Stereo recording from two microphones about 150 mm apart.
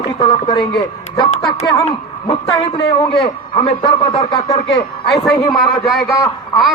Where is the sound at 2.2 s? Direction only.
35° left (ahead or behind).